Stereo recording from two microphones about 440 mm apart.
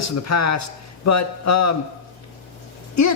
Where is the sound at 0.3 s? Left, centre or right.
Left.